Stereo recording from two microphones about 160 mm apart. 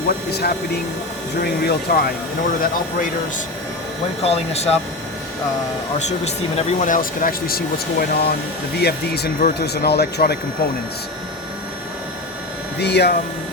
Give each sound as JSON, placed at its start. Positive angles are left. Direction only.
{"t": 0.3, "sound": "speech", "side_deg": 90}
{"t": 1.4, "sound": "speech", "side_deg": 75}
{"t": 4.2, "sound": "speech", "side_deg": 40}
{"t": 6.1, "sound": "speech", "side_deg": 45}
{"t": 8.8, "sound": "speech", "side_deg": 90}
{"t": 12.8, "sound": "speech", "side_deg": 90}